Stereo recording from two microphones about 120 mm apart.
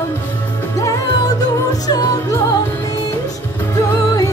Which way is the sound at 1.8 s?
30° left (ahead or behind).